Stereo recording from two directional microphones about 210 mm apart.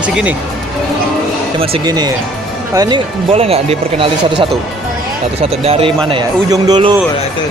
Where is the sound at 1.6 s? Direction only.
25° right (ahead or behind).